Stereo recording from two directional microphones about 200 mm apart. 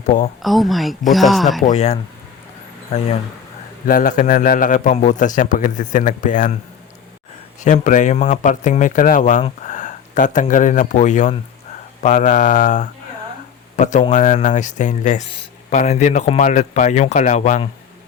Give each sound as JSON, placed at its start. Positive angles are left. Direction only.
{"t": 0.4, "sound": "speech", "side_deg": 0}
{"t": 1.6, "sound": "speech", "side_deg": 30}
{"t": 3.8, "sound": "speech", "side_deg": 40}
{"t": 7.6, "sound": "speech", "side_deg": 40}